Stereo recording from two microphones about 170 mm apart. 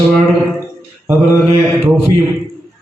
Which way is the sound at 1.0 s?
15° right (ahead or behind).